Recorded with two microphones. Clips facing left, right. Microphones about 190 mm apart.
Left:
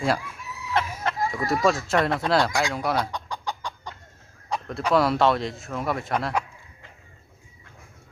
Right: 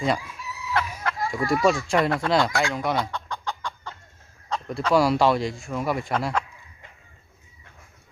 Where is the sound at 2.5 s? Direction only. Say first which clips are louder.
Right 1 dB; 15° left (ahead or behind).